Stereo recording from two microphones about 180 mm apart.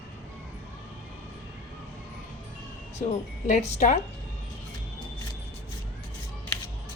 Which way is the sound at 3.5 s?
40° left (ahead or behind).